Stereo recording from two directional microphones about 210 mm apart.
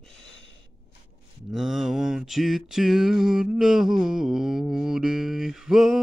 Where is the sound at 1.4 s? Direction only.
Centre (ahead or behind).